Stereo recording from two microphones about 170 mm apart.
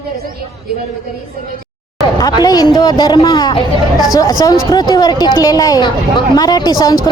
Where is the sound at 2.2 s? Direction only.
25° left (ahead or behind).